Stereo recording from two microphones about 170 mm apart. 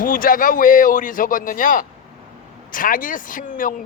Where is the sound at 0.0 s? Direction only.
55° left (ahead or behind).